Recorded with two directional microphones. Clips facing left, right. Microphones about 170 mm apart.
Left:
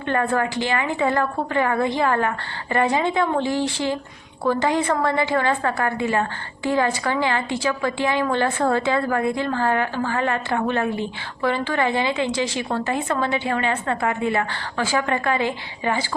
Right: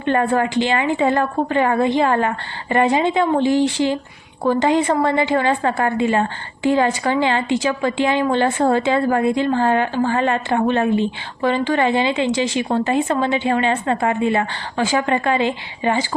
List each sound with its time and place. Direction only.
0.0 s a woman's voice: 20° right (ahead or behind)